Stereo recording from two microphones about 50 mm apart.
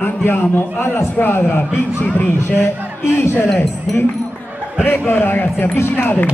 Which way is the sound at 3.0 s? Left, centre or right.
Left.